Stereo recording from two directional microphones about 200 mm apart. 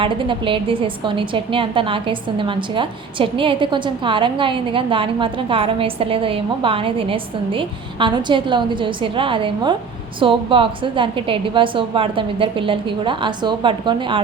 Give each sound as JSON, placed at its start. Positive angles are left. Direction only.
{"t": 0.0, "sound": "a woman's voice", "side_deg": -25}